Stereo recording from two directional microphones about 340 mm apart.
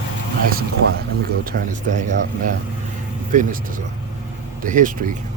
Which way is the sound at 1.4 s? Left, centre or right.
Right.